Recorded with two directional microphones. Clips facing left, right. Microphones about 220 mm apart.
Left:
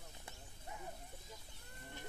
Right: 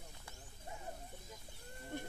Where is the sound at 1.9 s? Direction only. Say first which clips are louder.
Right 8 dB; 50° right (ahead or behind).